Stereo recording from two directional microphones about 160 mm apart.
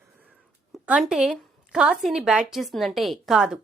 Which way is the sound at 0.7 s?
5° right (ahead or behind).